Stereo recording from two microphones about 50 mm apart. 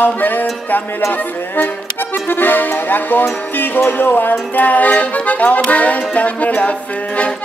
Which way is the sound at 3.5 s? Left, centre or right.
Left.